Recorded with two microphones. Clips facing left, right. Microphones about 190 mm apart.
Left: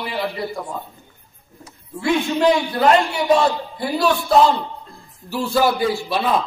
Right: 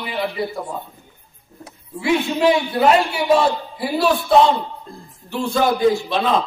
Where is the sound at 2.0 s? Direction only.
5° right (ahead or behind).